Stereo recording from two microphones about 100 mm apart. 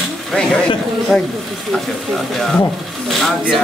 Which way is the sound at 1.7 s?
10° left (ahead or behind).